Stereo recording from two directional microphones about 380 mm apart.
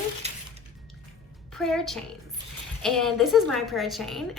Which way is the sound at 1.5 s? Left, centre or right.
Centre.